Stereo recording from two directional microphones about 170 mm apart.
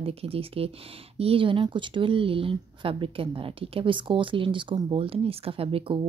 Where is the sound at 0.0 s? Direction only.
35° right (ahead or behind).